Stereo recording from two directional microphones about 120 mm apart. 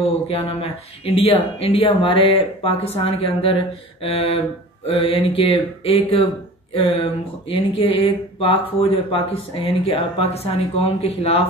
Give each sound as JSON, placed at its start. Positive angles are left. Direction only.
{"t": 0.0, "sound": "speech", "side_deg": 50}